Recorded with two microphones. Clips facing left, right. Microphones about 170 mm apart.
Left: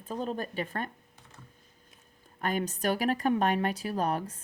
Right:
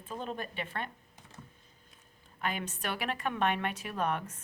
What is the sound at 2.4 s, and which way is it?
A woman's voice, 40° left (ahead or behind).